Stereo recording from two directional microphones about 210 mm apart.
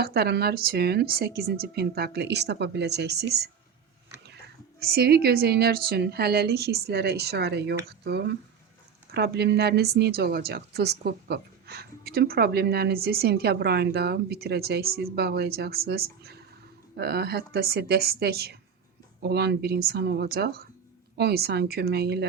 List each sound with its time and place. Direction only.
0.0 s speech: 50° right (ahead or behind)
4.8 s speech: 50° right (ahead or behind)